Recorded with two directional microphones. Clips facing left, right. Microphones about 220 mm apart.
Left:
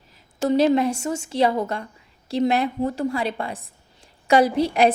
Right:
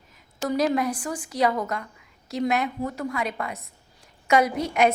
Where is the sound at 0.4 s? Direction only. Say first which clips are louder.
Left 5 dB; 30° left (ahead or behind).